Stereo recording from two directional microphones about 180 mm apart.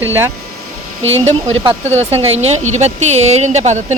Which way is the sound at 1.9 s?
35° right (ahead or behind).